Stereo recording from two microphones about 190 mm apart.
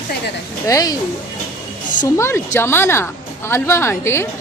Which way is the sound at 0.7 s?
15° left (ahead or behind).